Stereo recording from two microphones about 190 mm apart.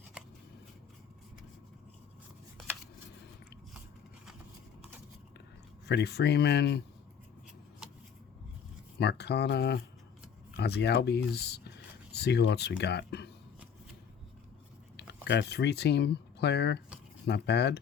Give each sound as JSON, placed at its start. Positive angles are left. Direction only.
{"t": 5.8, "sound": "speech", "side_deg": 60}
{"t": 9.0, "sound": "speech", "side_deg": 60}
{"t": 14.9, "sound": "speech", "side_deg": 60}